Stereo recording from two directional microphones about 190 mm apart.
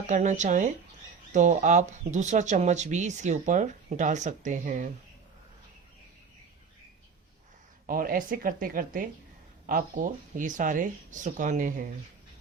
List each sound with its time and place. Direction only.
0.1 s speech: 40° right (ahead or behind)
7.9 s speech: 50° right (ahead or behind)